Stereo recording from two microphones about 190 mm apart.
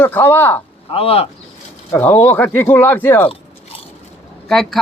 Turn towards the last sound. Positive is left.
turn(degrees=0)  # may be behind; listen again after turning